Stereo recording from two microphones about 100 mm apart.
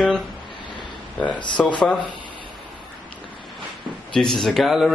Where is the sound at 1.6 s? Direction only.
5° left (ahead or behind).